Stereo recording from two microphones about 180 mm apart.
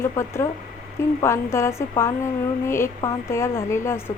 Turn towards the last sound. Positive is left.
turn(degrees=15)  # may be behind; listen again after turning